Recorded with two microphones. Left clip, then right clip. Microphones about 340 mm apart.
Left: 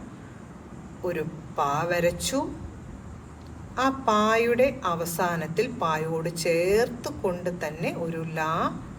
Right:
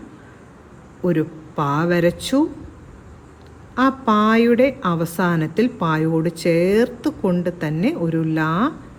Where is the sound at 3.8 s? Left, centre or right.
Right.